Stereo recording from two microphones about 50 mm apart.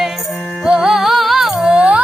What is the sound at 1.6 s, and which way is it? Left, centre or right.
Music, right.